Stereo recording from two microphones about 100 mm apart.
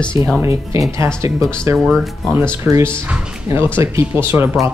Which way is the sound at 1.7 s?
Centre (ahead or behind).